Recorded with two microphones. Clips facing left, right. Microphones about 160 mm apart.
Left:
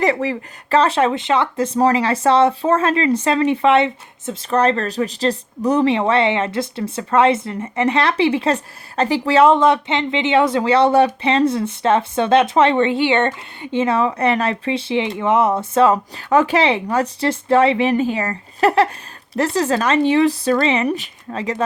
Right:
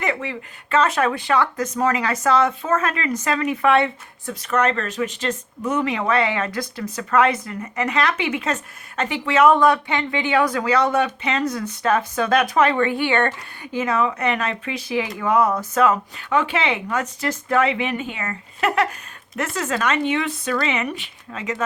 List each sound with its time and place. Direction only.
0.0 s speech: 35° left (ahead or behind)